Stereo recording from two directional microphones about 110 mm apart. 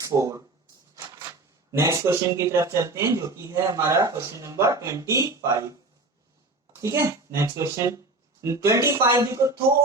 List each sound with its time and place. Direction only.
0.0 s a sound: 30° right (ahead or behind)
1.7 s a man's voice: 25° right (ahead or behind)
6.8 s a man's voice: 25° right (ahead or behind)